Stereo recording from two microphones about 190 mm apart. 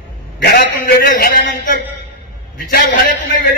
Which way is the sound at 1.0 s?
50° left (ahead or behind).